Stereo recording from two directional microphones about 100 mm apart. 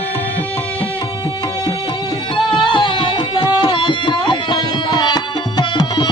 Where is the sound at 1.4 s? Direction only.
40° left (ahead or behind).